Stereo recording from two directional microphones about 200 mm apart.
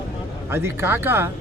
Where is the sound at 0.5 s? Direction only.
10° right (ahead or behind).